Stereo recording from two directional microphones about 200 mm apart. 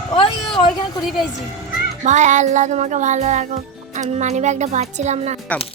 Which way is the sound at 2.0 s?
35° right (ahead or behind).